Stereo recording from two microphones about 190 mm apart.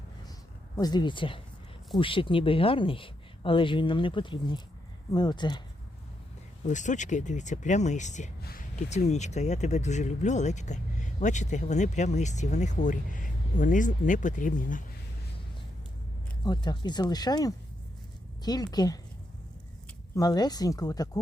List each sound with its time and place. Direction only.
0.8 s speech: 20° left (ahead or behind)
6.7 s speech: 40° left (ahead or behind)
8.4 s a sound: 55° left (ahead or behind)
8.7 s speech: 35° left (ahead or behind)
16.4 s speech: 20° left (ahead or behind)
20.1 s speech: 20° left (ahead or behind)